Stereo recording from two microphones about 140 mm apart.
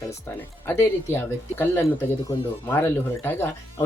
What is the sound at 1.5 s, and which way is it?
Speech, 15° left (ahead or behind).